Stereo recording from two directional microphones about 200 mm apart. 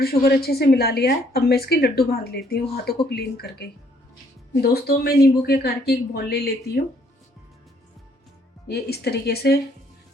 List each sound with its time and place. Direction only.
0.0 s a woman's voice: 50° left (ahead or behind)
8.6 s a woman's voice: 55° left (ahead or behind)